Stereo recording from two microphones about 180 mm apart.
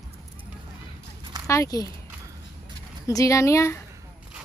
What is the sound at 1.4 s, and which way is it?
Speech, 15° left (ahead or behind).